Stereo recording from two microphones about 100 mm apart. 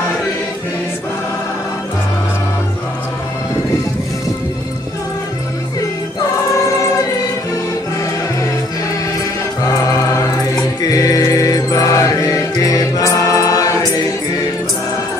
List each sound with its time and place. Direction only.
10.9 s music: 35° left (ahead or behind)